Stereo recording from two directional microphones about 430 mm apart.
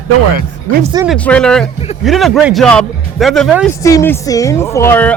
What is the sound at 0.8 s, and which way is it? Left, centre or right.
Speech, centre.